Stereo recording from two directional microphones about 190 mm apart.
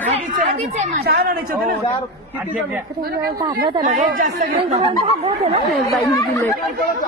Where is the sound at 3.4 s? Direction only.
25° right (ahead or behind).